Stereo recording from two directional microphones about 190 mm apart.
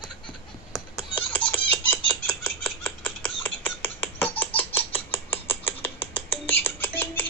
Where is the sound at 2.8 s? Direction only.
10° left (ahead or behind).